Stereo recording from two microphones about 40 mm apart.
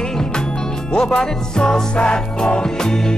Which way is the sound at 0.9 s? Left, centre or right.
Centre.